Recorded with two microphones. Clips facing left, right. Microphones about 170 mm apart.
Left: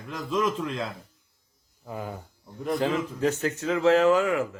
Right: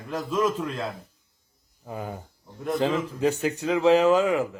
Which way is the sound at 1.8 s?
40° right (ahead or behind).